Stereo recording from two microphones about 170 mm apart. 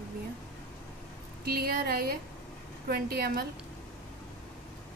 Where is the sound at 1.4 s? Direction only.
65° right (ahead or behind).